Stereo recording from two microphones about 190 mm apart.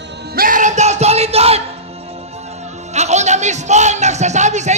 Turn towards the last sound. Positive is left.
turn(degrees=-40)  # may be behind; listen again after turning